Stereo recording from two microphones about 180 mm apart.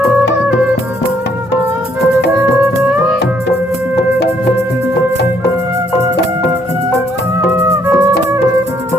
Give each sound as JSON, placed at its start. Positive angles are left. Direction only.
{"t": 3.9, "sound": "music", "side_deg": 70}
{"t": 7.7, "sound": "music", "side_deg": -15}